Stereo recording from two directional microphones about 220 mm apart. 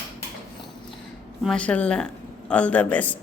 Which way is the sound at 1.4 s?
5° left (ahead or behind).